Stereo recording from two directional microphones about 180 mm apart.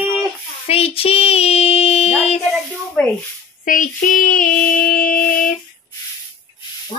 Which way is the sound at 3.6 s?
50° left (ahead or behind).